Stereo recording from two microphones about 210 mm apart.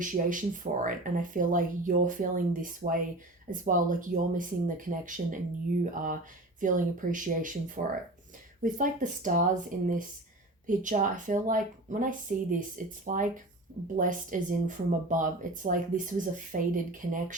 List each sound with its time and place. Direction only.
0.0 s speech: 40° right (ahead or behind)